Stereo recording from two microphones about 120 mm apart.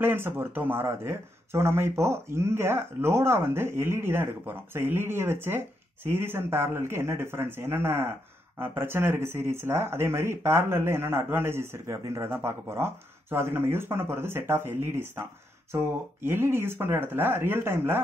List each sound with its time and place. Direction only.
0.0 s speech: 20° right (ahead or behind)